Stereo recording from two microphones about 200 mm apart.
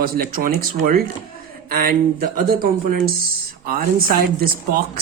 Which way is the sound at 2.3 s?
45° right (ahead or behind).